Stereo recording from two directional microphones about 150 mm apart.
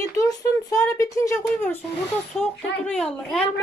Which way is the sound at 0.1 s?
25° left (ahead or behind).